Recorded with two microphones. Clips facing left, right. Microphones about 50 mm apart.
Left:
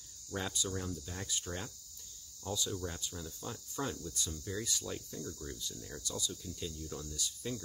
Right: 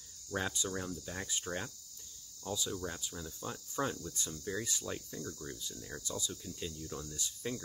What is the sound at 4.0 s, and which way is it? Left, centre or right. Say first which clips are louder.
Speech: left 1 dB; right.